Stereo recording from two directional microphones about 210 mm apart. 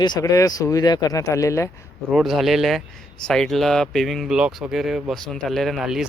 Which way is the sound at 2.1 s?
Centre (ahead or behind).